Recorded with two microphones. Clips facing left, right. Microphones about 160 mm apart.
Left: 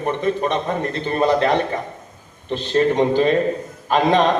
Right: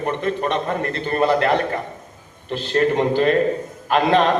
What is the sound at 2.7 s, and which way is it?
A man's voice, 15° left (ahead or behind).